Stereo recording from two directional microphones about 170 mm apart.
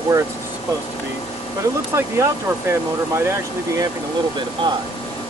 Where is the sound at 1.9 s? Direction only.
15° right (ahead or behind).